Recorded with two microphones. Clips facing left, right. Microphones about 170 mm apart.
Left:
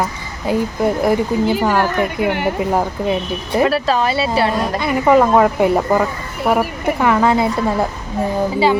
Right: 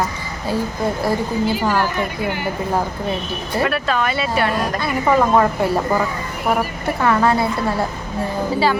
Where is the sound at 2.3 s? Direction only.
65° left (ahead or behind).